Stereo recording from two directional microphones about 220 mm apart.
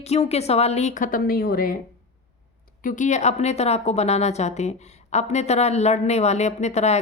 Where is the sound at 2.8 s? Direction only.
35° left (ahead or behind).